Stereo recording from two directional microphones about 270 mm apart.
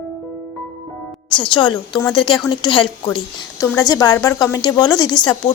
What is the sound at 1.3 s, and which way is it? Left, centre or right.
A woman's voice, centre.